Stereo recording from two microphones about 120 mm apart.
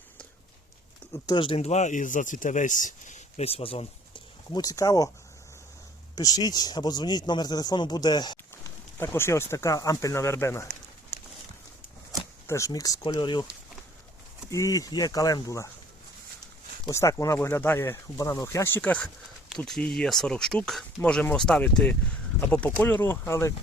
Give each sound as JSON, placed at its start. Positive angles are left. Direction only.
{"t": 1.3, "sound": "speech", "side_deg": 45}
{"t": 4.5, "sound": "speech", "side_deg": 30}
{"t": 6.1, "sound": "speech", "side_deg": 35}
{"t": 8.6, "sound": "speech", "side_deg": 20}
{"t": 12.5, "sound": "speech", "side_deg": 25}
{"t": 14.5, "sound": "speech", "side_deg": 30}
{"t": 16.9, "sound": "speech", "side_deg": 25}